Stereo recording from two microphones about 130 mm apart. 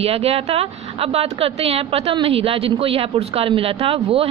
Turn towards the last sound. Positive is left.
turn(degrees=-45)  # may be behind; listen again after turning